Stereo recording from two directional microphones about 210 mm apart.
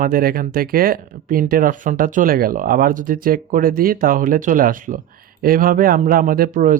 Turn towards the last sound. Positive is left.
turn(degrees=-40)  # may be behind; listen again after turning